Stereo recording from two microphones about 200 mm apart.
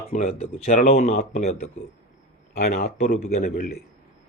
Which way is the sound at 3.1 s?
35° left (ahead or behind).